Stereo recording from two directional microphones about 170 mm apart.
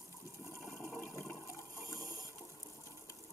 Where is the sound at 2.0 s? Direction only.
20° right (ahead or behind).